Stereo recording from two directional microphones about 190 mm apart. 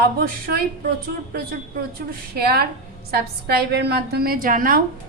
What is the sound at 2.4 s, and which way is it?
A woman's voice, 55° right (ahead or behind).